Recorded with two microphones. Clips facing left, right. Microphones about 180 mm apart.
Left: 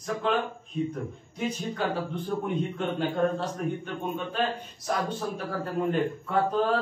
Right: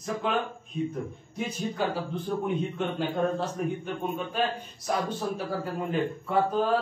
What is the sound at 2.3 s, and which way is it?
Speech, 5° left (ahead or behind).